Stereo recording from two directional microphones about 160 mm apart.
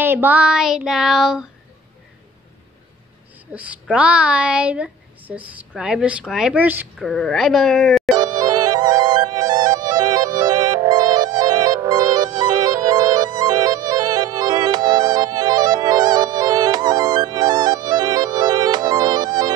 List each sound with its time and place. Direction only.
0.0 s child singing: 10° right (ahead or behind)
3.5 s a woman's voice: 10° right (ahead or behind)
7.0 s child singing: 5° left (ahead or behind)
8.2 s music: 25° right (ahead or behind)